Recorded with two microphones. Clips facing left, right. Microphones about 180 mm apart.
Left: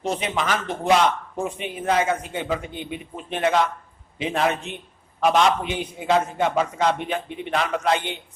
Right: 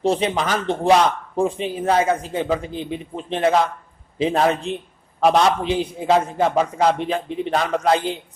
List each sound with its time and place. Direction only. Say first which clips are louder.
0.0 s a man's voice: right 5 dB; 30° right (ahead or behind)